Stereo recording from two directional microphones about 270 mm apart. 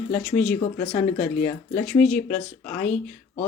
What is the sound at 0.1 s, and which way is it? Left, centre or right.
Speech, centre.